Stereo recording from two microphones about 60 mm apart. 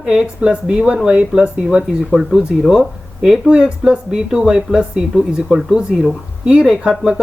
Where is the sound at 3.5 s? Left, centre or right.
Centre.